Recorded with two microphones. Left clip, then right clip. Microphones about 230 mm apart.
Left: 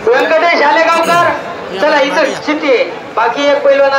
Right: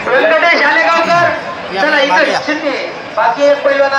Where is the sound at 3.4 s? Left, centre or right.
Left.